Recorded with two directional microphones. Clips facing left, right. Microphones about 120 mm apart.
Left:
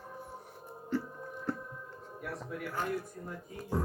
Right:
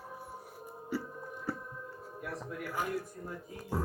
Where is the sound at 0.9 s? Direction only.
10° right (ahead or behind).